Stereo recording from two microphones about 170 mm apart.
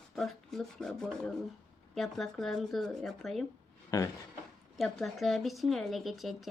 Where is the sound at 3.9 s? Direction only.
20° left (ahead or behind).